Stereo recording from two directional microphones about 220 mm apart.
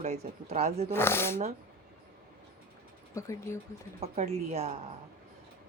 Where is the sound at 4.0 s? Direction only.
30° right (ahead or behind).